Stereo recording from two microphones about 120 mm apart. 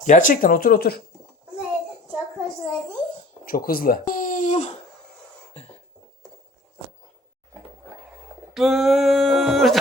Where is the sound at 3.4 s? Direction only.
50° left (ahead or behind).